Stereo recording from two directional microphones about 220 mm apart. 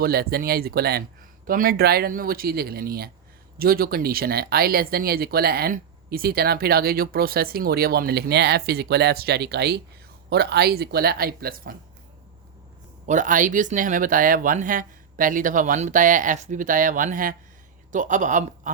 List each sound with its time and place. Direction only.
0.0 s speech: 45° right (ahead or behind)
13.1 s speech: 35° right (ahead or behind)